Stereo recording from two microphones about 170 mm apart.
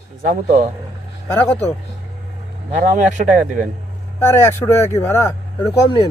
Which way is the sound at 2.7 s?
50° right (ahead or behind).